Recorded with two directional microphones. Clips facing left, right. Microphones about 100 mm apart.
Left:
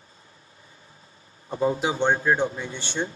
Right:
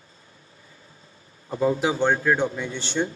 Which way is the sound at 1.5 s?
25° left (ahead or behind).